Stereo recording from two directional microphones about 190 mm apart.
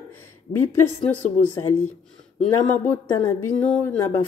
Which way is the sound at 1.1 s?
10° left (ahead or behind).